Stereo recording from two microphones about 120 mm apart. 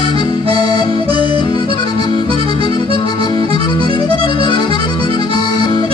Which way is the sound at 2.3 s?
40° left (ahead or behind).